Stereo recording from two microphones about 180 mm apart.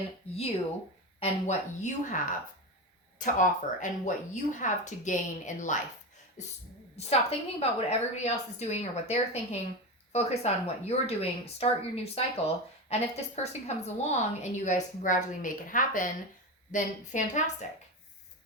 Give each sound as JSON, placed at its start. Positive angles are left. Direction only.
{"t": 1.2, "sound": "a woman's voice", "side_deg": 40}